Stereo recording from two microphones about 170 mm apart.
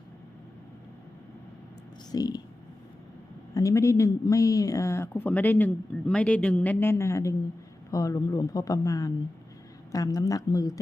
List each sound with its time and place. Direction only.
2.1 s speech: 20° left (ahead or behind)
3.5 s speech: 20° left (ahead or behind)